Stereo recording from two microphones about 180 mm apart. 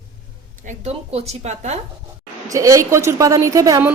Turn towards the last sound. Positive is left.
turn(degrees=-15)  # may be behind; listen again after turning